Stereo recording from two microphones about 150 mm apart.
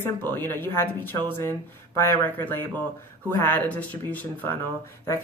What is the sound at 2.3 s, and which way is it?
Speech, 10° left (ahead or behind).